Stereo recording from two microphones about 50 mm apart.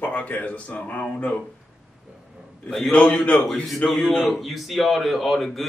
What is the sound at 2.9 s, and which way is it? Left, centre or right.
Speech, left.